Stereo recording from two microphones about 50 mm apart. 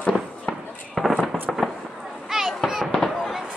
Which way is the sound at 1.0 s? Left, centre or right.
Centre.